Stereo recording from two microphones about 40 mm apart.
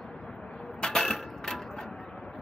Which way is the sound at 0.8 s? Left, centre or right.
Centre.